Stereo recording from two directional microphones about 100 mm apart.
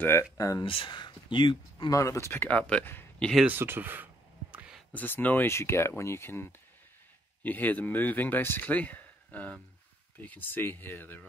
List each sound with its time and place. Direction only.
0.0 s speech: 30° left (ahead or behind)
0.6 s speech: 55° left (ahead or behind)
1.9 s speech: 30° left (ahead or behind)
3.2 s speech: 5° left (ahead or behind)
3.4 s a sound: 20° right (ahead or behind)
4.9 s speech: 15° left (ahead or behind)